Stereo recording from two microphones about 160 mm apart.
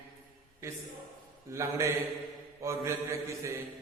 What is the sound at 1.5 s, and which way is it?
Mantra, 20° right (ahead or behind).